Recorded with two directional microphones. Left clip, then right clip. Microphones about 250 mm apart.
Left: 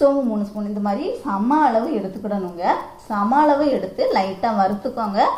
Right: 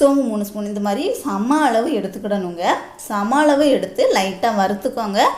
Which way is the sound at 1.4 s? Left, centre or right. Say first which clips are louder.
Right 1 dB; right.